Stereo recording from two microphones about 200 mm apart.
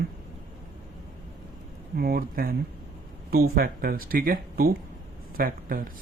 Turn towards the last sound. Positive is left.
turn(degrees=-45)  # may be behind; listen again after turning